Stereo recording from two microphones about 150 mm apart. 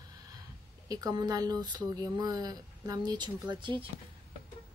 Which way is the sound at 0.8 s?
25° right (ahead or behind).